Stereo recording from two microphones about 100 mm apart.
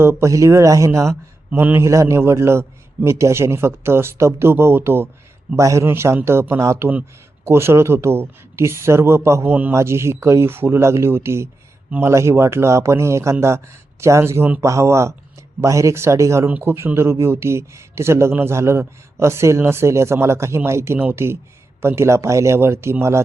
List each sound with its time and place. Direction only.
0.0 s a man's voice: 25° right (ahead or behind)